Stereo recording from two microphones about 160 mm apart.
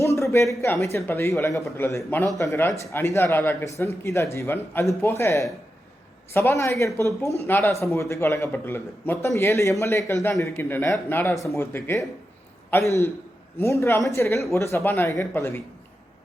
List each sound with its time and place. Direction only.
0.2 s a man's voice: 20° left (ahead or behind)